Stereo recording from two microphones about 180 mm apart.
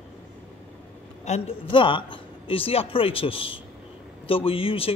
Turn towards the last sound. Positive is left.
turn(degrees=30)  # may be behind; listen again after turning